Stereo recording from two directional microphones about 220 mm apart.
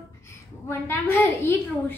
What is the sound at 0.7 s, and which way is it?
A woman's voice, 10° left (ahead or behind).